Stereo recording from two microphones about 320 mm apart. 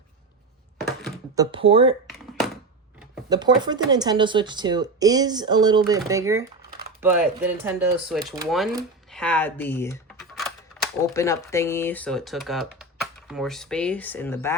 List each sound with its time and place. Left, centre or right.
0.8 s a sound: centre
1.4 s speech: centre
2.0 s thunk: centre
3.0 s speech: centre